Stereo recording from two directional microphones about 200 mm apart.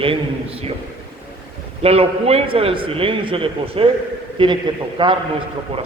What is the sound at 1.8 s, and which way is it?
A man's voice, 30° right (ahead or behind).